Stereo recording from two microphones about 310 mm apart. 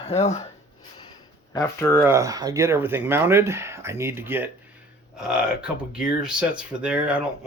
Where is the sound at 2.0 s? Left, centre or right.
Centre.